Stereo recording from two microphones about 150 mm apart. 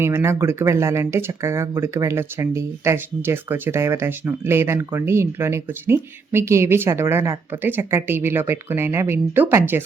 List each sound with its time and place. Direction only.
0.0 s speech: 15° right (ahead or behind)